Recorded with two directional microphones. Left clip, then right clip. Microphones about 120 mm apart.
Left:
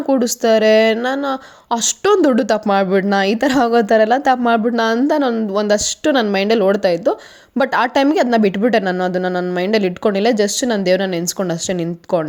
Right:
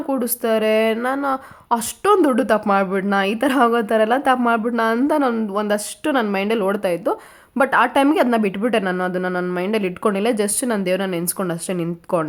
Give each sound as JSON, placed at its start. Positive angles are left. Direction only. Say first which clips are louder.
{"t": 0.1, "sound": "speech", "louder": "left 6 dB", "side_deg": 35}
{"t": 5.0, "sound": "speech", "louder": "left 2 dB", "side_deg": 20}
{"t": 5.5, "sound": "speech", "louder": "left 5 dB", "side_deg": 35}
{"t": 7.6, "sound": "speech", "louder": "left 1 dB", "side_deg": 35}
{"t": 8.1, "sound": "speech", "louder": "left 3 dB", "side_deg": 25}